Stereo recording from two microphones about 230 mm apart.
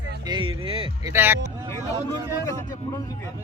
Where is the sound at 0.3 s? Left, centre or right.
Right.